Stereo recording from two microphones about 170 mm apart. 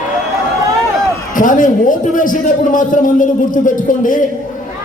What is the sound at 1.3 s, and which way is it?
A man's voice, 50° left (ahead or behind).